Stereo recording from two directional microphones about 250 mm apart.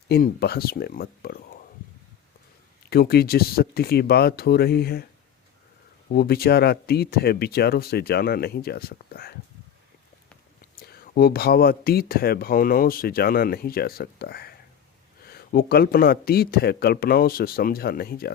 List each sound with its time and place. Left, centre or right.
0.1 s speech: left
2.9 s speech: left
6.1 s speech: left
10.8 s speech: left